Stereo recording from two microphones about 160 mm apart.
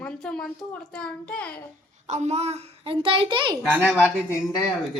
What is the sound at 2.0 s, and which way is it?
A child's voice, 45° right (ahead or behind).